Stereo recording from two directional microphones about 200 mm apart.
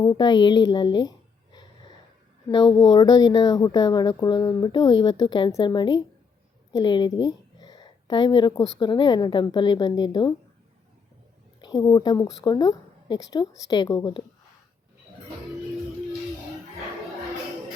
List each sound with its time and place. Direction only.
0.0 s a woman's voice: 20° left (ahead or behind)
2.5 s a woman's voice: 20° left (ahead or behind)
11.6 s a woman's voice: 20° left (ahead or behind)